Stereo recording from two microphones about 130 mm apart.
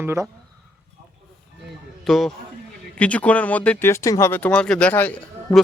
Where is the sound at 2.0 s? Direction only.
Centre (ahead or behind).